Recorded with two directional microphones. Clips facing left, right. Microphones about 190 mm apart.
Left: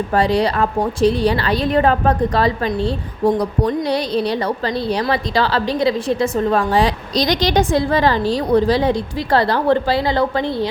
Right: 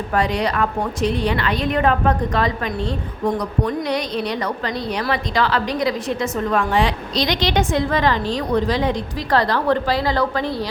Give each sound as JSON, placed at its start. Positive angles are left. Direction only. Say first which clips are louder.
{"t": 0.1, "sound": "a woman's voice", "louder": "left 3 dB", "side_deg": 30}